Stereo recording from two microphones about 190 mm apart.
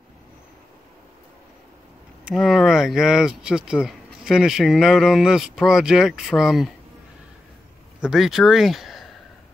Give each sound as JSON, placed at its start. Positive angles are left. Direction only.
{"t": 2.2, "sound": "speech", "side_deg": 0}
{"t": 8.0, "sound": "speech", "side_deg": 0}